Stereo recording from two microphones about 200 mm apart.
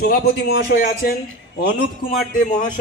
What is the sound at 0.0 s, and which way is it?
A man's voice, 50° left (ahead or behind).